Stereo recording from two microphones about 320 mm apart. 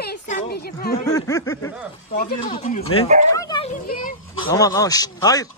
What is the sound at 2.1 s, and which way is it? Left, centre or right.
Speech, left.